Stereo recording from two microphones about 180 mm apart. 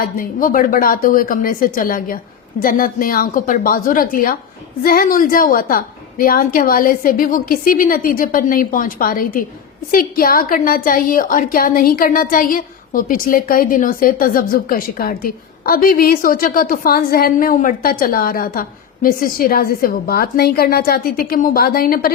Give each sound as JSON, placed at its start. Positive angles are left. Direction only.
{"t": 0.0, "sound": "a woman's voice", "side_deg": 50}